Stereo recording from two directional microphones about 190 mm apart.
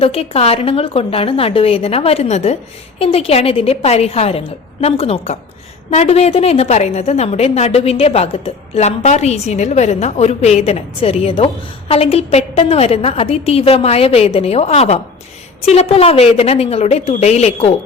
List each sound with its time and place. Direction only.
0.0 s a woman's voice: 30° left (ahead or behind)